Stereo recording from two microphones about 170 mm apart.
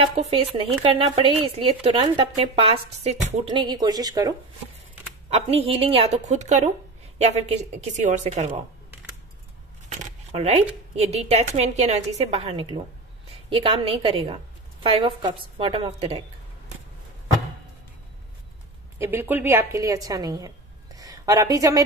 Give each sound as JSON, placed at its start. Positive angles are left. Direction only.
{"t": 0.0, "sound": "speech", "side_deg": -35}
{"t": 5.3, "sound": "speech", "side_deg": -35}
{"t": 9.8, "sound": "a sound", "side_deg": -40}
{"t": 11.0, "sound": "speech", "side_deg": -40}
{"t": 18.9, "sound": "a woman's voice", "side_deg": -15}